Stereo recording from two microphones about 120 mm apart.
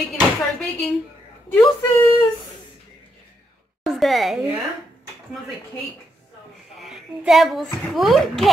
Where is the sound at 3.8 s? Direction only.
Centre (ahead or behind).